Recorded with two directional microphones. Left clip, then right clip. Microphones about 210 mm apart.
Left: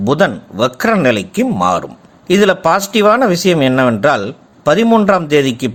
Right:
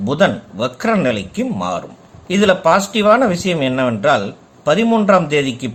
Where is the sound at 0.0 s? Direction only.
35° left (ahead or behind).